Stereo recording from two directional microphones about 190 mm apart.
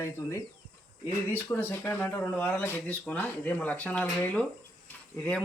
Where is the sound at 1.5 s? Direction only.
10° left (ahead or behind).